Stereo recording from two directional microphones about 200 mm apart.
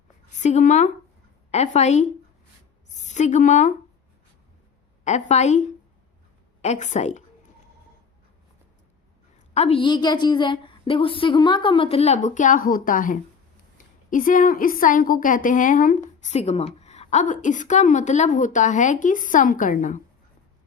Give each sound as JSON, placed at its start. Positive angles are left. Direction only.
{"t": 0.4, "sound": "a woman's voice", "side_deg": 35}
{"t": 5.0, "sound": "a woman's voice", "side_deg": 35}
{"t": 9.6, "sound": "a woman's voice", "side_deg": 30}